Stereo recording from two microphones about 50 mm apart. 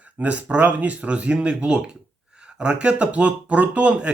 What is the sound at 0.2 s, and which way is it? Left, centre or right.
Speech, right.